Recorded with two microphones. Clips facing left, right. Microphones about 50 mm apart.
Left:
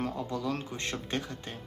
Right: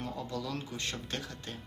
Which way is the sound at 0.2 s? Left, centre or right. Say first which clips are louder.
Left 4 dB; left.